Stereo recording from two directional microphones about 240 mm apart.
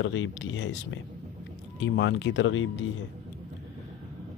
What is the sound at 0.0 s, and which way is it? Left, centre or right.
Speech, left.